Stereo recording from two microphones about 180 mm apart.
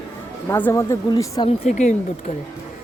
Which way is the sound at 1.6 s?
40° left (ahead or behind).